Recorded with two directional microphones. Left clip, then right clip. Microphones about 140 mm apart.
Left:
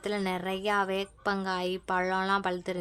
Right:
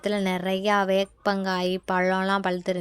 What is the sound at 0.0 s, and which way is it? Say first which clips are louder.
A woman's voice: right 5 dB; 30° right (ahead or behind).